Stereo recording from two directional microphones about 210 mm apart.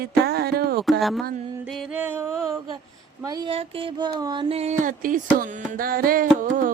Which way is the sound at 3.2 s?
20° right (ahead or behind).